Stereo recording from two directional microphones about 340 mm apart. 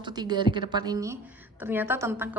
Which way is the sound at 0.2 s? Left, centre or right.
Centre.